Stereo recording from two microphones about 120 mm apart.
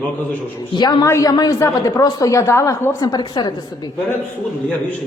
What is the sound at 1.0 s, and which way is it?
A woman's voice, 25° left (ahead or behind).